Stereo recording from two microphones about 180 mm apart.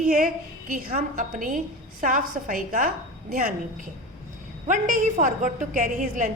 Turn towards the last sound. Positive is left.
turn(degrees=-45)  # may be behind; listen again after turning